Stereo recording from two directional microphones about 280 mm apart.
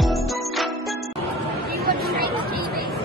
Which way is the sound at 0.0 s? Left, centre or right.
Centre.